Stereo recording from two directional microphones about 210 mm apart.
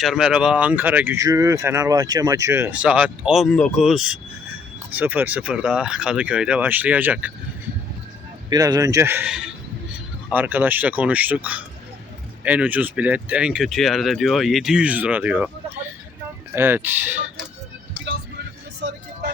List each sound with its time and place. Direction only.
0.0 s speech: centre (ahead or behind)
8.4 s speech: 15° right (ahead or behind)
18.8 s speech: 55° right (ahead or behind)